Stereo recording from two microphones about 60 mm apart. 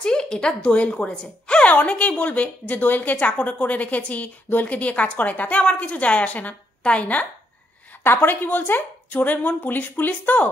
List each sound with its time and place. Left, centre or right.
0.0 s a woman's voice: centre
8.0 s speech: left